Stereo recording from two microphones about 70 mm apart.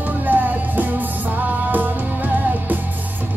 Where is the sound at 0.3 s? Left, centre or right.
Right.